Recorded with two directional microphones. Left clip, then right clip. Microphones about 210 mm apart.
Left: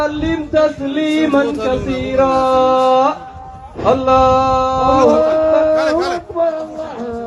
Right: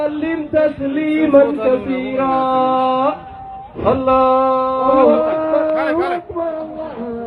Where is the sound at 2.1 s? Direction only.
20° right (ahead or behind).